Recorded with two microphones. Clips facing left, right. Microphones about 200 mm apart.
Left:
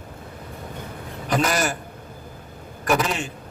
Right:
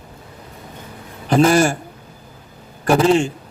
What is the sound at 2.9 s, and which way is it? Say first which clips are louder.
Speech: right 9 dB; 30° right (ahead or behind).